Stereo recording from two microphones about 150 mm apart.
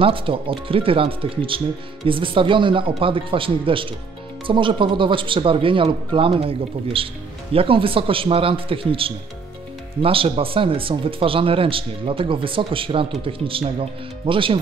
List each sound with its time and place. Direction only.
0.0 s speech: 35° right (ahead or behind)